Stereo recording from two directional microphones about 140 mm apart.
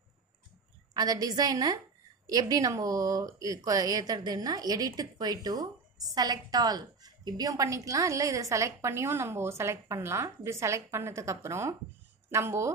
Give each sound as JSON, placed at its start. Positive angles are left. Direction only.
{"t": 0.9, "sound": "a woman's voice", "side_deg": -30}